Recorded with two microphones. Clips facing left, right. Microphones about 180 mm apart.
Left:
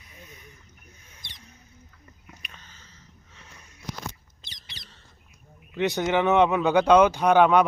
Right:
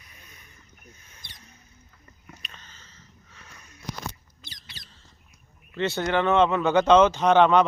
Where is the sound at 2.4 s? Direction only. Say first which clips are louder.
Even; 10° left (ahead or behind).